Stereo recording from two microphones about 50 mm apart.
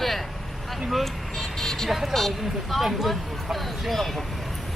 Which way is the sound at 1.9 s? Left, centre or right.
Centre.